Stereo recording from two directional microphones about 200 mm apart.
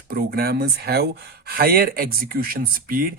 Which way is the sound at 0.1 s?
50° right (ahead or behind).